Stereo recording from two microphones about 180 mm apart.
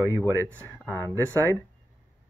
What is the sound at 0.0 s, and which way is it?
Speech, 15° left (ahead or behind).